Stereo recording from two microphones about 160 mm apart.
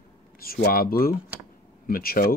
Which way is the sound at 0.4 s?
70° left (ahead or behind).